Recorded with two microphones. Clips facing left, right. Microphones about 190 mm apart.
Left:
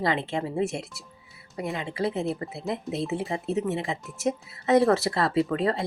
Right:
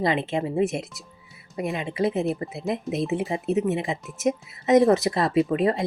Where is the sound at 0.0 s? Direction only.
20° right (ahead or behind).